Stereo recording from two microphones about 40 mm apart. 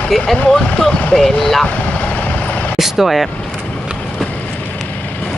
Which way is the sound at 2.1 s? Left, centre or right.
Left.